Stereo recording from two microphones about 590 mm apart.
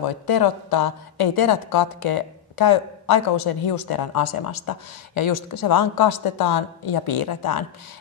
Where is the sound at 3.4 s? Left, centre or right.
Left.